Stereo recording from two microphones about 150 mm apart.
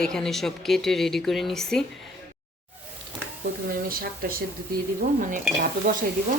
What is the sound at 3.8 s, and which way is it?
Speech, 75° right (ahead or behind).